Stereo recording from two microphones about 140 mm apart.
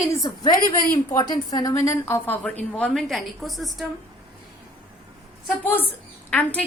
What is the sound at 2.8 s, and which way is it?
A woman's voice, 5° left (ahead or behind).